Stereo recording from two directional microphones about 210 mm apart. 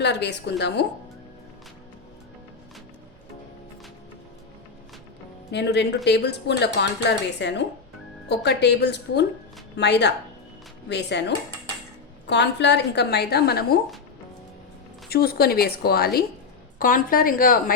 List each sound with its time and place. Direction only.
0.0 s a woman's voice: 55° left (ahead or behind)
5.5 s a woman's voice: 55° left (ahead or behind)
12.3 s speech: 55° left (ahead or behind)
15.1 s a woman's voice: 45° left (ahead or behind)